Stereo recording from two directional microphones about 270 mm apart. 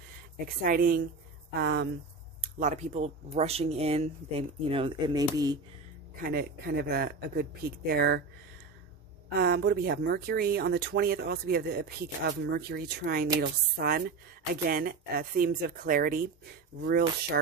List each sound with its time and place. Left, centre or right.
0.5 s speech: right
2.4 s speech: right
6.1 s speech: right
9.4 s speech: right